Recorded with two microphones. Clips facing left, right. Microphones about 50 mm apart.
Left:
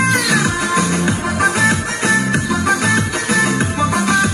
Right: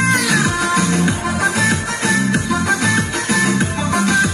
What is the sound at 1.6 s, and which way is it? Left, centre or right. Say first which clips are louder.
Music: left 2 dB; centre.